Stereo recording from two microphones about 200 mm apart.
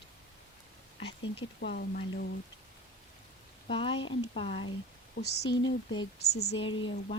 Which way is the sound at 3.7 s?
25° left (ahead or behind).